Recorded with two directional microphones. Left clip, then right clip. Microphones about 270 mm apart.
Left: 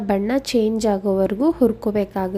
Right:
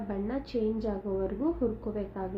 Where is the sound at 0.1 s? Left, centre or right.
Left.